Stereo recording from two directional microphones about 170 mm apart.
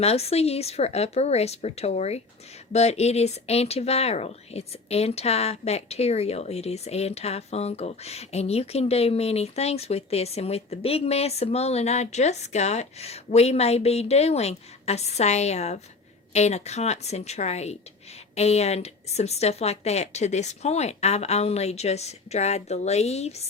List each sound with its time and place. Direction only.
0.0 s speech: 35° left (ahead or behind)